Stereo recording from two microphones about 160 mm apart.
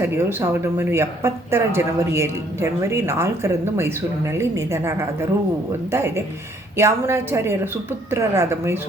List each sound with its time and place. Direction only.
0.0 s speech: 15° right (ahead or behind)